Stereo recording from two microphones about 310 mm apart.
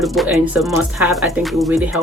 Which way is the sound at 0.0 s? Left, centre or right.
Centre.